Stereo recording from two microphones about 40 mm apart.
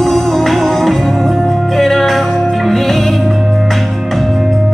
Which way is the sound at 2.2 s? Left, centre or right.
Left.